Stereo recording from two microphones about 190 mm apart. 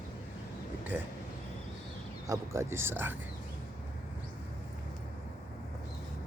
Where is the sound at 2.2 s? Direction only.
15° right (ahead or behind).